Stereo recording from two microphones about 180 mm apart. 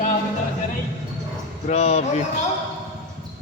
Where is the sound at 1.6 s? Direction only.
35° left (ahead or behind).